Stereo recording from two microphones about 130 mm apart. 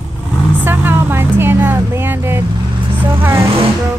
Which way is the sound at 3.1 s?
20° right (ahead or behind).